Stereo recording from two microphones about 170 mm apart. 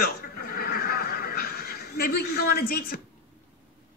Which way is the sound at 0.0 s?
65° left (ahead or behind).